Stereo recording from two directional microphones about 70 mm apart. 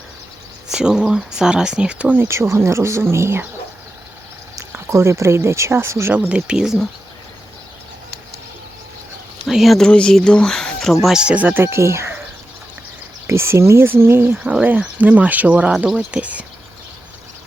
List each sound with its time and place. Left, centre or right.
0.7 s speech: centre
2.1 s speech: right
4.9 s speech: right
6.1 s speech: centre
9.5 s speech: centre
9.7 s speech: centre
11.0 s speech: centre
11.4 s speech: right
13.2 s a sound: right
13.8 s speech: right
14.3 s speech: centre